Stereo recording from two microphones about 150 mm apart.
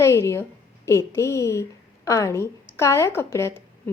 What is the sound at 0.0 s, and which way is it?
A woman's voice, 20° left (ahead or behind).